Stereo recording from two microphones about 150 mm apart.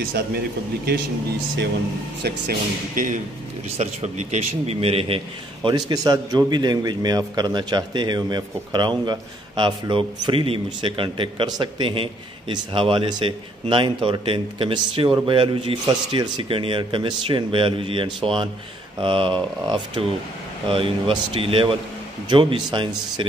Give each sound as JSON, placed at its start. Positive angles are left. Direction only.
{"t": 2.2, "sound": "speech", "side_deg": -90}
{"t": 3.0, "sound": "speech", "side_deg": -60}
{"t": 3.7, "sound": "a man's voice", "side_deg": -45}